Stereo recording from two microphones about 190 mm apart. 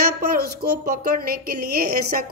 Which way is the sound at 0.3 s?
55° right (ahead or behind).